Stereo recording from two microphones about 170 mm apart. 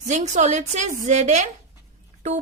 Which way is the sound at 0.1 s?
45° right (ahead or behind).